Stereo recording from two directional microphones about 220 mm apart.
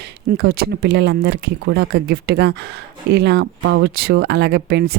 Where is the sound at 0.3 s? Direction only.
45° right (ahead or behind).